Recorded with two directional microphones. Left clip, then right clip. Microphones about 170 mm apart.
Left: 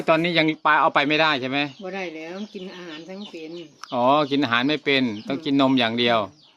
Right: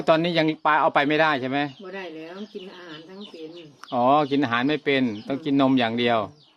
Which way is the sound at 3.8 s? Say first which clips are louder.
Even; 5° right (ahead or behind).